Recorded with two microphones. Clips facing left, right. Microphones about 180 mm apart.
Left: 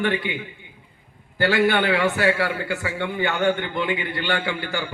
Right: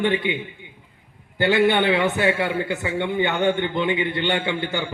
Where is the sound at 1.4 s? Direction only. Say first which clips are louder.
Right 1 dB; 20° right (ahead or behind).